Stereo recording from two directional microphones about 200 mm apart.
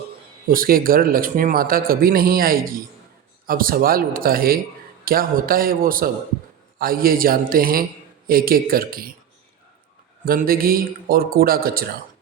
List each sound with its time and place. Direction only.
0.4 s speech: 45° right (ahead or behind)
10.2 s speech: 45° right (ahead or behind)